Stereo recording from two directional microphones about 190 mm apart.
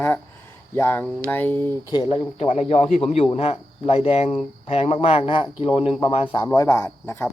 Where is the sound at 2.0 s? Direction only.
30° left (ahead or behind); by 7.2 s 10° left (ahead or behind).